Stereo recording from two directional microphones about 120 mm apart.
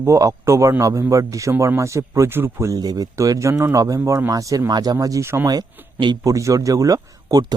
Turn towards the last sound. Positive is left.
turn(degrees=-30)  # may be behind; listen again after turning